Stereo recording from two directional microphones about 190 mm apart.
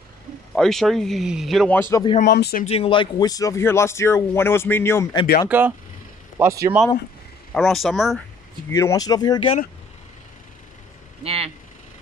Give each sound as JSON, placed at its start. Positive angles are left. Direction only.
{"t": 0.6, "sound": "speech", "side_deg": 0}
{"t": 1.8, "sound": "speech", "side_deg": 15}
{"t": 2.2, "sound": "speech", "side_deg": 60}
{"t": 2.6, "sound": "speech", "side_deg": 30}
{"t": 5.5, "sound": "speech", "side_deg": -10}
{"t": 7.5, "sound": "speech", "side_deg": 0}
{"t": 8.6, "sound": "speech", "side_deg": 15}
{"t": 11.2, "sound": "vehicle", "side_deg": -30}